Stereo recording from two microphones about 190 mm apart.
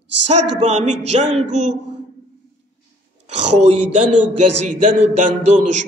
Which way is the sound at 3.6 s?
35° right (ahead or behind).